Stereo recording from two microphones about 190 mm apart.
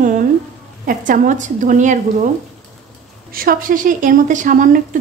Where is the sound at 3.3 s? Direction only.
50° right (ahead or behind).